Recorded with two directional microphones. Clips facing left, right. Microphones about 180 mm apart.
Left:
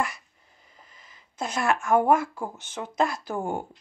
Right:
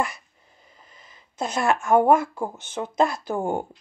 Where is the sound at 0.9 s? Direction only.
25° right (ahead or behind).